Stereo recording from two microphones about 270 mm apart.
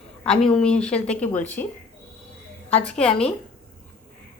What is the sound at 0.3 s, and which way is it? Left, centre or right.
A woman's voice, centre.